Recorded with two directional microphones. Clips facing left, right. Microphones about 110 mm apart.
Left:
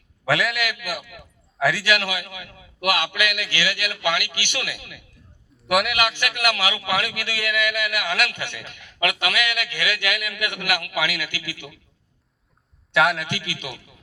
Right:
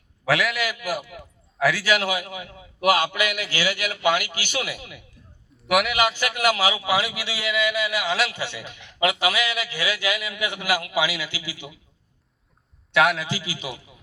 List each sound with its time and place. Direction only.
0.3 s a man's voice: centre (ahead or behind)
0.6 s a man's voice: 35° right (ahead or behind)
1.5 s a man's voice: centre (ahead or behind)
1.9 s a man's voice: 35° right (ahead or behind)
5.5 s a sound: centre (ahead or behind)
5.9 s a man's voice: 30° right (ahead or behind)
12.9 s a man's voice: centre (ahead or behind)
13.2 s a man's voice: 30° right (ahead or behind)